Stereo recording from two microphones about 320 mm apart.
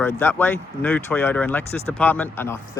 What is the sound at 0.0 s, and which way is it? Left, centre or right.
Speech, centre.